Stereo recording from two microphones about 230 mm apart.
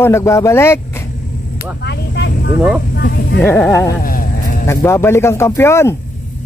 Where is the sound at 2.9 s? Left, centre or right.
Left.